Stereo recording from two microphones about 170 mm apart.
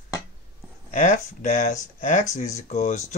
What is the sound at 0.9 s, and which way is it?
Speech, 45° left (ahead or behind).